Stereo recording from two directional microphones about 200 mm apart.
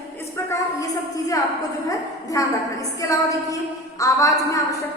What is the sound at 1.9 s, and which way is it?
A woman's voice, 15° left (ahead or behind).